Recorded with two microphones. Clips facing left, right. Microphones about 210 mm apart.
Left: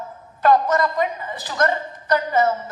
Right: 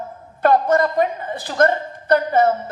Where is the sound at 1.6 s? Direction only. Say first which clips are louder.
Right 4 dB; 55° right (ahead or behind).